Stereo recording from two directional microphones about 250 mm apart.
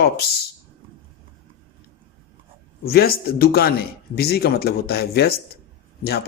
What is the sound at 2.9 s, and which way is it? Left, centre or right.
Speech, left.